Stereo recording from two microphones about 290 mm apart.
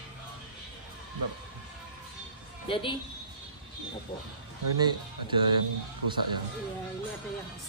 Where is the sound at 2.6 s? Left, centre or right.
Centre.